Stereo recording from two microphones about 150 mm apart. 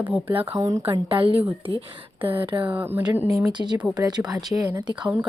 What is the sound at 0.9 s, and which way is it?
Speech, 35° right (ahead or behind).